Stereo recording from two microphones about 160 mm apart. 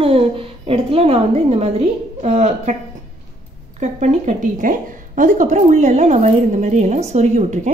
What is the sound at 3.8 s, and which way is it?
A woman's voice, 45° right (ahead or behind).